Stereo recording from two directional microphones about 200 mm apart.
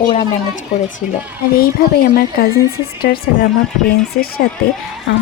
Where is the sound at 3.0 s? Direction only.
50° left (ahead or behind).